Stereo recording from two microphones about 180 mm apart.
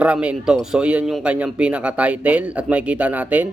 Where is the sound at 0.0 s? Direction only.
5° right (ahead or behind).